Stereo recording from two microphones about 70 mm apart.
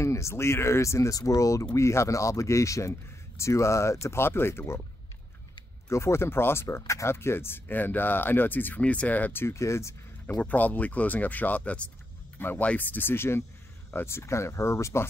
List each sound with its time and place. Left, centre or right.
0.0 s speech: left
5.9 s speech: left
9.6 s speech: left
10.4 s speech: left